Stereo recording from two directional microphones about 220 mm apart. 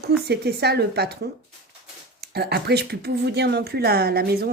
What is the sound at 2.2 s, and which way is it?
Speech, 45° right (ahead or behind).